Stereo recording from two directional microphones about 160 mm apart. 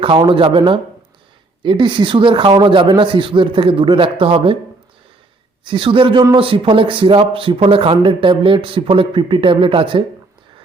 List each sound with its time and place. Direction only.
0.0 s speech: 35° right (ahead or behind)
5.6 s speech: 30° right (ahead or behind)